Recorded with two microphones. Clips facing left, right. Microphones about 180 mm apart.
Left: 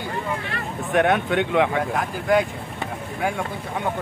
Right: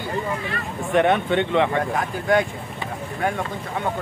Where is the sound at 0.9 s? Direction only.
5° left (ahead or behind).